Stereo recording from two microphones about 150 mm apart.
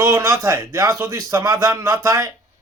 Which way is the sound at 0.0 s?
20° right (ahead or behind).